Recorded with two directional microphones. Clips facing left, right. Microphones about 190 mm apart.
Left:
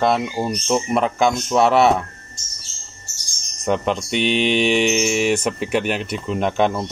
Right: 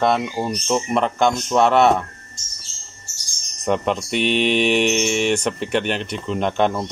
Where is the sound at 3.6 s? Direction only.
Centre (ahead or behind).